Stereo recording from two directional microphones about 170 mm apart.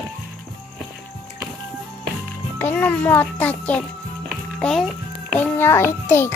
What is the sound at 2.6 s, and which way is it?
A child's voice, 10° left (ahead or behind).